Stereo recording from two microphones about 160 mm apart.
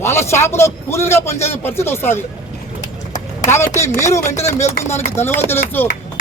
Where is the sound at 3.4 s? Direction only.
15° left (ahead or behind).